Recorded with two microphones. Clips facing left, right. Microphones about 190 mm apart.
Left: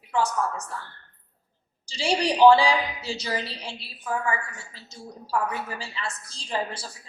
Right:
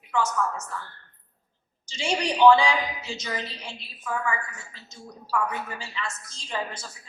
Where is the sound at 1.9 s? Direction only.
35° left (ahead or behind).